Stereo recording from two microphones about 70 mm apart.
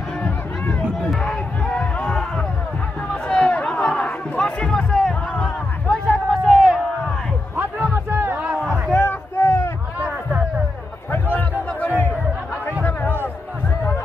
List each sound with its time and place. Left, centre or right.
0.2 s crowd: centre
3.1 s music: centre
6.3 s a sound: centre
7.9 s music: right
8.9 s a sound: left
11.8 s music: left